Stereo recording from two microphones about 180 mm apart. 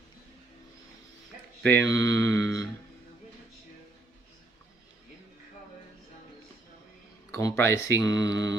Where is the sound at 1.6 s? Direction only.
10° left (ahead or behind).